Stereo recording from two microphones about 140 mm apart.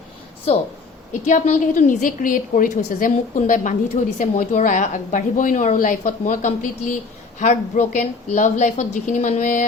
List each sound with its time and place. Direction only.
1.1 s a woman's voice: 60° left (ahead or behind)
7.3 s a woman's voice: 55° left (ahead or behind)